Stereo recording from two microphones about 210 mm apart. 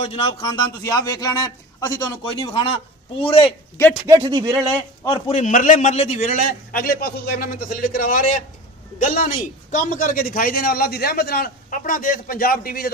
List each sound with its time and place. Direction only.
0.0 s a man's voice: 25° left (ahead or behind)
4.2 s speech: 20° right (ahead or behind)
5.0 s a man's voice: 20° left (ahead or behind)
5.4 s a man's voice: 35° left (ahead or behind)